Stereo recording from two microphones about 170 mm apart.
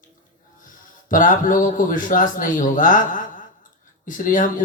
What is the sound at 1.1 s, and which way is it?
Speech, 50° left (ahead or behind).